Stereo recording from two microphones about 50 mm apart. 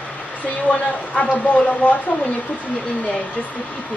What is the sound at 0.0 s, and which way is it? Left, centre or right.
Speech, left.